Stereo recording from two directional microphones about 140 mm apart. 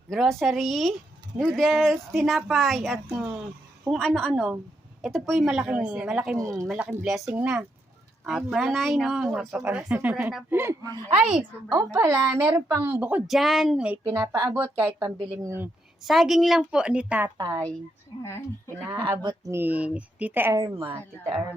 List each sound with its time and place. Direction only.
0.1 s speech: centre (ahead or behind)
6.3 s speech: 20° right (ahead or behind)
6.7 s a woman's voice: 5° right (ahead or behind)
13.2 s speech: centre (ahead or behind)
14.1 s speech: 20° right (ahead or behind)
16.0 s speech: centre (ahead or behind)
17.3 s speech: 25° right (ahead or behind)
18.2 s speech: 20° left (ahead or behind)
18.9 s a woman's voice: 15° right (ahead or behind)
20.6 s speech: 25° right (ahead or behind)